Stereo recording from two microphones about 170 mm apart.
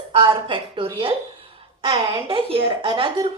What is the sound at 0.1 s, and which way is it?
A woman's voice, 30° right (ahead or behind).